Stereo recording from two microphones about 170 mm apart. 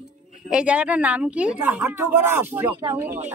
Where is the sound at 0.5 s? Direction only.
5° right (ahead or behind).